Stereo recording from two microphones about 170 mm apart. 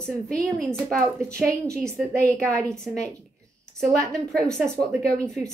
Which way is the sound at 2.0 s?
5° left (ahead or behind).